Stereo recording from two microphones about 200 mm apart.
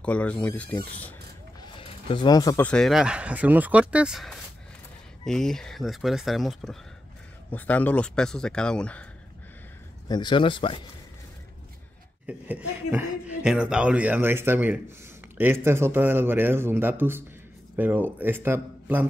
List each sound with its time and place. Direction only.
0.0 s speech: 5° left (ahead or behind)
1.6 s a sound: 30° left (ahead or behind)
2.6 s speech: 5° left (ahead or behind)
10.0 s speech: 20° left (ahead or behind)
12.3 s speech: 10° right (ahead or behind)